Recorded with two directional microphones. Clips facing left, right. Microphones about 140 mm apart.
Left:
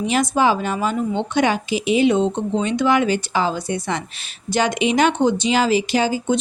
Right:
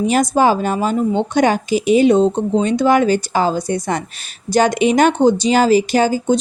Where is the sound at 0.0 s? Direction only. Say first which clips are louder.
Right 4 dB; 45° right (ahead or behind).